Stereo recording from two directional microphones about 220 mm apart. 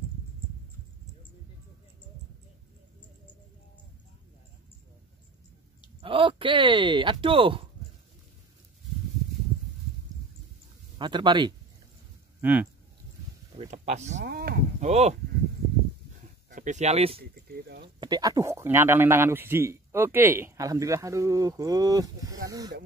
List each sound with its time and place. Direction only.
5.9 s speech: 25° right (ahead or behind)
11.0 s speech: 20° right (ahead or behind)
12.4 s speech: 10° right (ahead or behind)
13.6 s speech: 30° right (ahead or behind)
14.2 s speech: 45° right (ahead or behind)
14.8 s speech: 30° right (ahead or behind)
16.4 s speech: 35° right (ahead or behind)
17.2 s speech: 45° right (ahead or behind)
17.8 s speech: 20° right (ahead or behind)